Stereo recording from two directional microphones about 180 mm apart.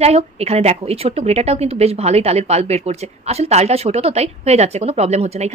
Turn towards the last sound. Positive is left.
turn(degrees=-35)  # may be behind; listen again after turning